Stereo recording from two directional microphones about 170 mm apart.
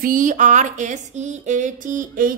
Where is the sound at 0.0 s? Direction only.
50° right (ahead or behind).